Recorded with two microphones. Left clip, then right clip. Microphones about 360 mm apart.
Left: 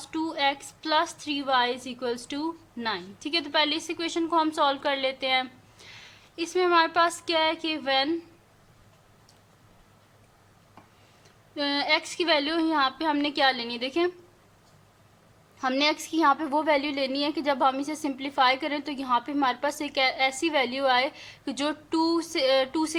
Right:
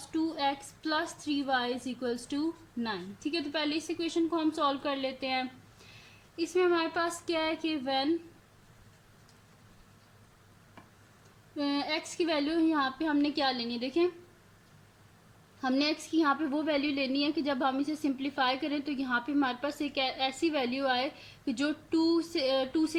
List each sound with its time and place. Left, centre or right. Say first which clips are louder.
0.3 s a woman's voice: left 5 dB; left
11.5 s a woman's voice: left 7 dB; left
15.6 s a woman's voice: left 5 dB; left